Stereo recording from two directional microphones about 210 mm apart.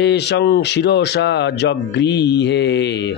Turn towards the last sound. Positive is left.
turn(degrees=55)  # may be behind; listen again after turning